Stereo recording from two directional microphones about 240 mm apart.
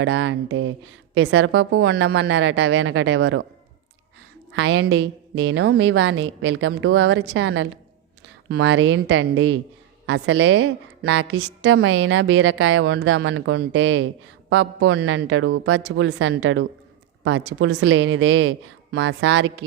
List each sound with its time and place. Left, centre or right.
0.0 s a woman's voice: right
4.5 s a woman's voice: right